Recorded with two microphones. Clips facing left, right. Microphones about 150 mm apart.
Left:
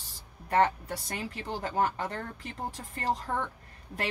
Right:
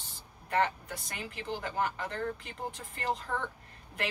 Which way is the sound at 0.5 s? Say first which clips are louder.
Left 4 dB; 35° left (ahead or behind).